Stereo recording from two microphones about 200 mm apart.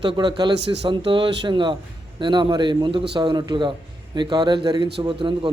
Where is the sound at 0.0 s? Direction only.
25° right (ahead or behind).